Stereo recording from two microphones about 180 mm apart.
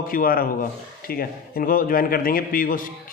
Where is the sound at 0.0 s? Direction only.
50° left (ahead or behind).